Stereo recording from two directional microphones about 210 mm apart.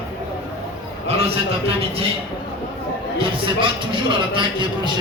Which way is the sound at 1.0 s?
30° right (ahead or behind).